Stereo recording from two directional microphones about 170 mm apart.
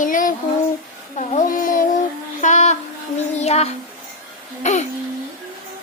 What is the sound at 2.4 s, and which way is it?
Music, 45° left (ahead or behind).